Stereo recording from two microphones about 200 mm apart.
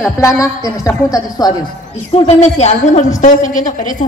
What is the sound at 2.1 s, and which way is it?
A woman's voice, 30° left (ahead or behind).